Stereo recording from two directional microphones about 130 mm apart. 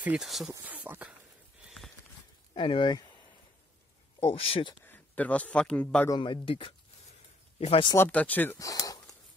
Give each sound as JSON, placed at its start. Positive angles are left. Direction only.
{"t": 0.0, "sound": "speech", "side_deg": -5}
{"t": 0.5, "sound": "speech", "side_deg": -20}
{"t": 2.5, "sound": "speech", "side_deg": 40}
{"t": 4.2, "sound": "speech", "side_deg": 50}
{"t": 4.8, "sound": "speech", "side_deg": 15}
{"t": 6.0, "sound": "speech", "side_deg": 35}
{"t": 8.1, "sound": "speech", "side_deg": 10}
{"t": 8.5, "sound": "a sound", "side_deg": 25}